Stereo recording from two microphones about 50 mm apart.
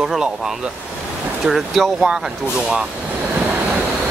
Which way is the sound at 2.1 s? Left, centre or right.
Centre.